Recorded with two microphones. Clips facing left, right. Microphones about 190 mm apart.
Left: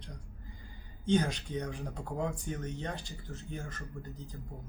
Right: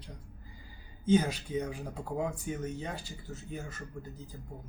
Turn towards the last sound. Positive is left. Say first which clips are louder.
# even
turn(degrees=-5)  # may be behind; listen again after turning